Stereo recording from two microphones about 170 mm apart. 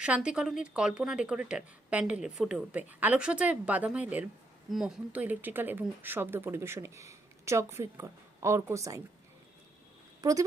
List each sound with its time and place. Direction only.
0.0 s a woman's voice: 5° right (ahead or behind)
10.2 s speech: 20° right (ahead or behind)